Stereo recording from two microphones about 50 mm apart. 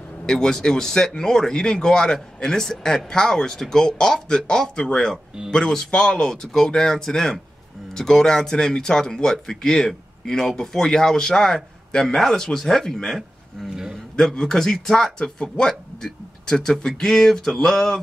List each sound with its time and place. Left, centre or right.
0.3 s speech: centre
13.7 s a man's voice: centre
14.1 s speech: centre